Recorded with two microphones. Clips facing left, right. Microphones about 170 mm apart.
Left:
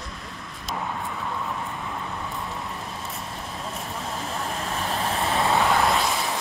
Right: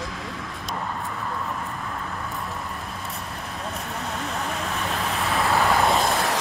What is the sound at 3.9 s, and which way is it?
Vehicle, centre (ahead or behind).